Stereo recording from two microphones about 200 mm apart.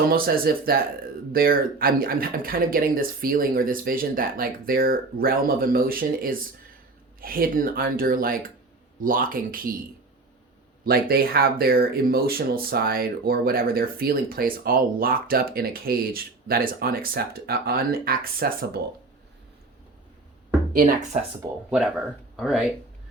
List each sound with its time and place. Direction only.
0.1 s speech: 45° right (ahead or behind)
10.8 s speech: 50° right (ahead or behind)
20.7 s speech: 40° right (ahead or behind)
21.7 s speech: 5° right (ahead or behind)